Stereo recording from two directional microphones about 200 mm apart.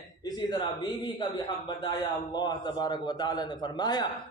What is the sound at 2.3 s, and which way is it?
A man's voice, 20° left (ahead or behind).